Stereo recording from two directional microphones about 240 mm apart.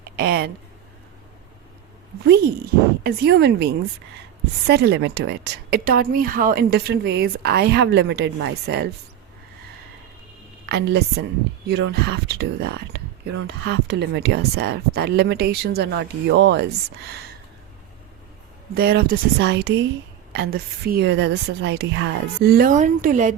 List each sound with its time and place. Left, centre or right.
0.2 s a woman's voice: right
3.0 s a woman's voice: right
10.7 s speech: right
18.7 s a woman's voice: right